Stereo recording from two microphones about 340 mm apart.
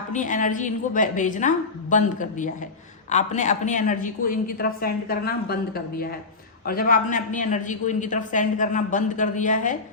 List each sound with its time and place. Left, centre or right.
0.1 s a woman's voice: left